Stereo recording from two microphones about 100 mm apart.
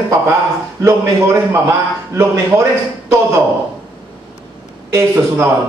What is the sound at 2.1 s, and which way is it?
Speech, 30° right (ahead or behind).